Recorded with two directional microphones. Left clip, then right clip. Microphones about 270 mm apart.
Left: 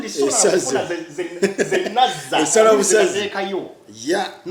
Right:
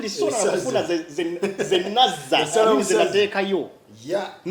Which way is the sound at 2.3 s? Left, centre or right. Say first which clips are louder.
Left 1 dB; right.